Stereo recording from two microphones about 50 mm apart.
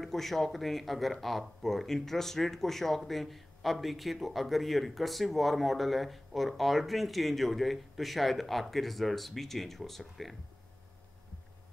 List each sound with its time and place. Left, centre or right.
0.0 s speech: centre